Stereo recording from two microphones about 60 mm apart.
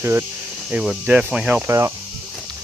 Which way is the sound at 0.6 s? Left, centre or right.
Centre.